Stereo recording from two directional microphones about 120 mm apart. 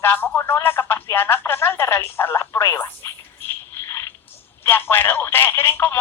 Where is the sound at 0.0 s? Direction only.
15° left (ahead or behind).